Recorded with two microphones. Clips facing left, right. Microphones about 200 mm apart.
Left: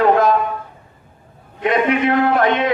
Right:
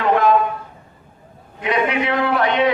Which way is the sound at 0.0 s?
40° left (ahead or behind).